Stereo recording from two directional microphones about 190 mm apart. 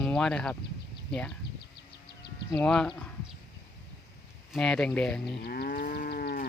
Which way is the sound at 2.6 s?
5° left (ahead or behind).